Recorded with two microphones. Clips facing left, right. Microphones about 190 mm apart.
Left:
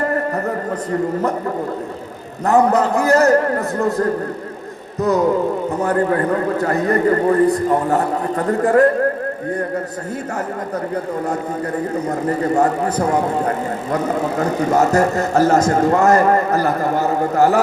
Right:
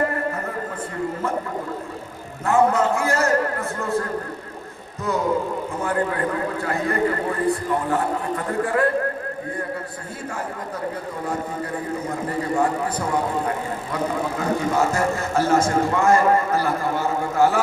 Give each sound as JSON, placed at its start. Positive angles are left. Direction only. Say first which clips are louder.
{"t": 2.5, "sound": "a man's voice", "louder": "left 4 dB", "side_deg": 40}
{"t": 4.9, "sound": "a sound", "louder": "left 8 dB", "side_deg": 40}
{"t": 5.8, "sound": "a man's voice", "louder": "left 6 dB", "side_deg": 40}
{"t": 12.0, "sound": "a man's voice", "louder": "left 7 dB", "side_deg": 40}